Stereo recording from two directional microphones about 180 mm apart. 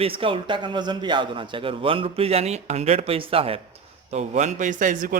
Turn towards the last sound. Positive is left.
turn(degrees=-50)  # may be behind; listen again after turning